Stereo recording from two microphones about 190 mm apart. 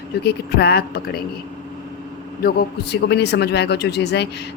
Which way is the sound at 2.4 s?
55° left (ahead or behind).